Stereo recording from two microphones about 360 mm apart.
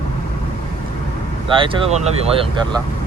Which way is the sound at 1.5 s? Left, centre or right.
Centre.